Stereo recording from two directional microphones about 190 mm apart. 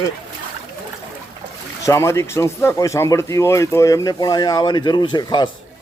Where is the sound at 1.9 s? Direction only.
15° left (ahead or behind).